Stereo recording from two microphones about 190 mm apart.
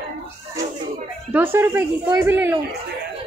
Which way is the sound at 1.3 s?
10° right (ahead or behind).